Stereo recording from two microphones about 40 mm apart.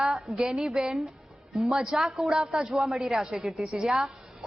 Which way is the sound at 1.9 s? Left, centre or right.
Centre.